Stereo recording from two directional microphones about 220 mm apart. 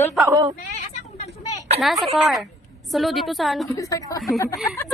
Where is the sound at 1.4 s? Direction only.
15° left (ahead or behind).